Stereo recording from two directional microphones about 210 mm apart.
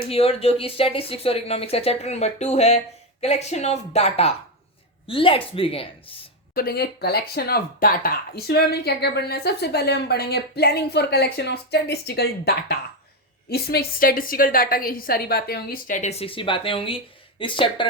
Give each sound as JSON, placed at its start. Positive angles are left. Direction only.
{"t": 0.1, "sound": "speech", "side_deg": 30}
{"t": 6.5, "sound": "speech", "side_deg": 45}